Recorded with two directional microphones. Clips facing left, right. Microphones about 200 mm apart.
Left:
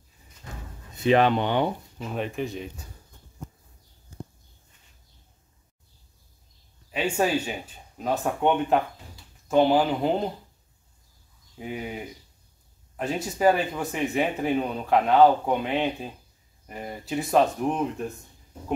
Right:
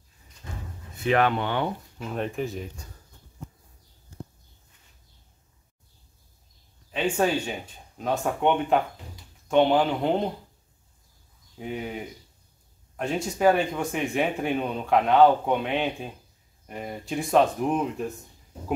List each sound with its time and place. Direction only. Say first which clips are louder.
0.9 s speech: left 3 dB; 20° left (ahead or behind)
2.0 s speech: right 1 dB; centre (ahead or behind)
6.9 s speech: even; 10° left (ahead or behind)
11.5 s speech: right 1 dB; centre (ahead or behind)